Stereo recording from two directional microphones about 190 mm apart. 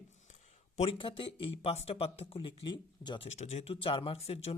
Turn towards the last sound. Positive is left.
turn(degrees=30)  # may be behind; listen again after turning